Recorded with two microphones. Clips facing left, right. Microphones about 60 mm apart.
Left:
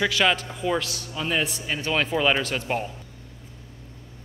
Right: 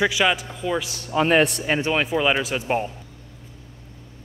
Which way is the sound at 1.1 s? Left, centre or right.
Right.